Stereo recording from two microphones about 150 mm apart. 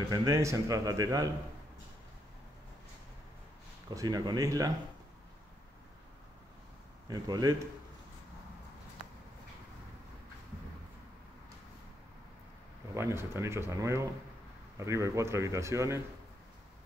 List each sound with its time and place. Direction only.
0.1 s a man's voice: 20° right (ahead or behind)
3.9 s a man's voice: 25° right (ahead or behind)
7.1 s a man's voice: 25° right (ahead or behind)
12.9 s a man's voice: 15° right (ahead or behind)